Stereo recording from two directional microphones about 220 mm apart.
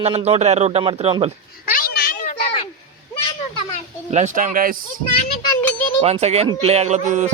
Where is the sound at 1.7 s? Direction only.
40° left (ahead or behind).